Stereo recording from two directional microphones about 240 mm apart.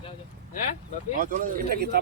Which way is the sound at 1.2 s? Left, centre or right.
Right.